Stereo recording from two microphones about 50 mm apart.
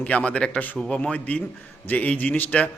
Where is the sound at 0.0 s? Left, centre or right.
Left.